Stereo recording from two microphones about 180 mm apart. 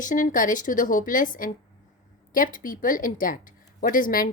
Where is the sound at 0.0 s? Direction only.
45° left (ahead or behind).